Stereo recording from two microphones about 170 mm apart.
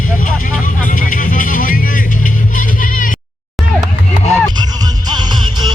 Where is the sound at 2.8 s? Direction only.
50° left (ahead or behind).